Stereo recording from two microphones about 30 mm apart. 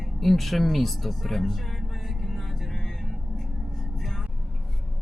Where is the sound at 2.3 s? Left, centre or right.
Centre.